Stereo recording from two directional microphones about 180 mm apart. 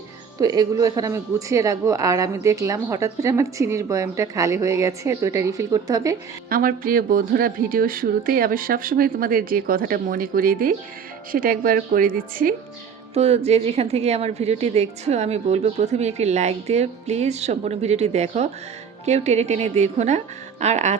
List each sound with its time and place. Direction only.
0.3 s a woman's voice: 20° right (ahead or behind)
6.5 s a woman's voice: 50° right (ahead or behind)
13.1 s a woman's voice: 35° right (ahead or behind)